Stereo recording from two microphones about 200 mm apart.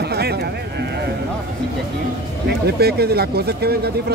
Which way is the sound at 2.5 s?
55° right (ahead or behind).